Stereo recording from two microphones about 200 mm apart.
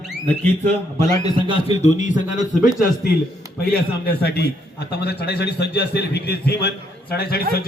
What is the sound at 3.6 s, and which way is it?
A man's voice, 50° left (ahead or behind).